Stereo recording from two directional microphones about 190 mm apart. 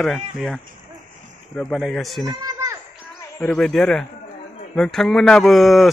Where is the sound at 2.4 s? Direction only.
20° right (ahead or behind).